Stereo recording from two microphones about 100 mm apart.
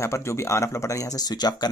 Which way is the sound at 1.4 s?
45° left (ahead or behind).